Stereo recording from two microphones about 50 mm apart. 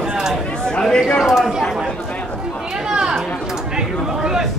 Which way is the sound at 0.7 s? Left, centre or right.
Centre.